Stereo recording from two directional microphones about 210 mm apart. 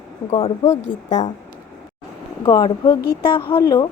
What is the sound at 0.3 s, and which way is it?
A woman's voice, 30° left (ahead or behind).